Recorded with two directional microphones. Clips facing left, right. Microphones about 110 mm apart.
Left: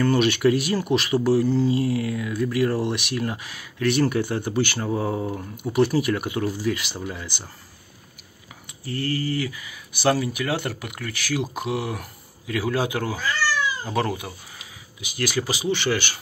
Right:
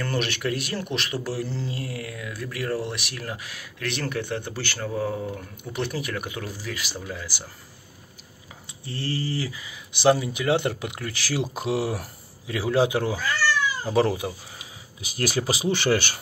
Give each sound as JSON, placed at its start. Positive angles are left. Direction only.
{"t": 0.0, "sound": "speech", "side_deg": 5}
{"t": 5.6, "sound": "speech", "side_deg": 5}
{"t": 8.8, "sound": "speech", "side_deg": -30}
{"t": 15.0, "sound": "speech", "side_deg": -40}